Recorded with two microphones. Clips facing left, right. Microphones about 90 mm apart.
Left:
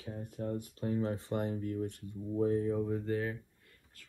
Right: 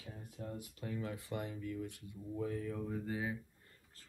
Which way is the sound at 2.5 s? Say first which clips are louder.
Left 9 dB; 35° left (ahead or behind).